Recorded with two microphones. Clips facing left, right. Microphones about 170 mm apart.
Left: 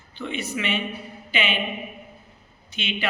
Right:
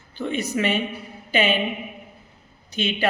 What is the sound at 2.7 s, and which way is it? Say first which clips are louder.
Speech: right 6 dB; 40° right (ahead or behind).